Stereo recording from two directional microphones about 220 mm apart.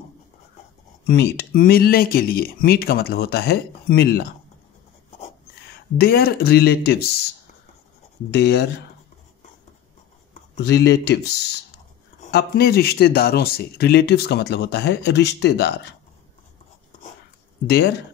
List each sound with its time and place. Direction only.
1.0 s speech: 50° left (ahead or behind)
8.3 s speech: 50° left (ahead or behind)
10.6 s speech: 50° left (ahead or behind)
17.6 s speech: 45° left (ahead or behind)